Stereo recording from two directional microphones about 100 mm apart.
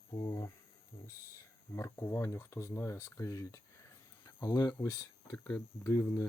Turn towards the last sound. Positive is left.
turn(degrees=15)  # may be behind; listen again after turning